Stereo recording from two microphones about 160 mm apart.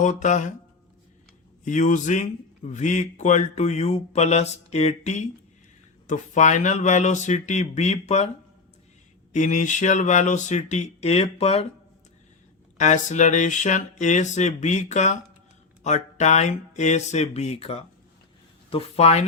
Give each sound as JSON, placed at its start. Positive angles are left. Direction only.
{"t": 0.0, "sound": "speech", "side_deg": 50}
{"t": 1.6, "sound": "speech", "side_deg": 50}
{"t": 9.3, "sound": "speech", "side_deg": 50}
{"t": 12.7, "sound": "speech", "side_deg": 50}